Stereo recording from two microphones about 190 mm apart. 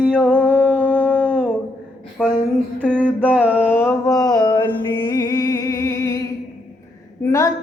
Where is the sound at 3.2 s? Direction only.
5° right (ahead or behind).